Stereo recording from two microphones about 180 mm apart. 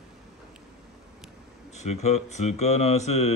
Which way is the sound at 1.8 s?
40° left (ahead or behind).